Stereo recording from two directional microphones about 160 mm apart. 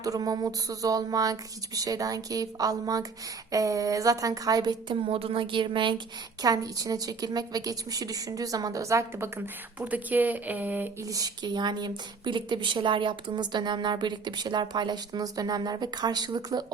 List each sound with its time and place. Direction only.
0.0 s speech: 20° right (ahead or behind)